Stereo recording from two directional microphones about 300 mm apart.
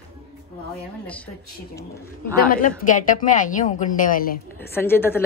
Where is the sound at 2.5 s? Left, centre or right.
Left.